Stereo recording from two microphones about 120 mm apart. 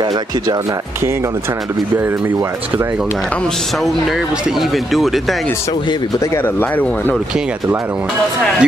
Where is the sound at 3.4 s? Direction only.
Centre (ahead or behind).